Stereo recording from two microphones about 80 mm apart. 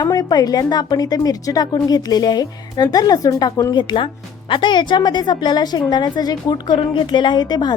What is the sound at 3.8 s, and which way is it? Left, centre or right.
A woman's voice, left.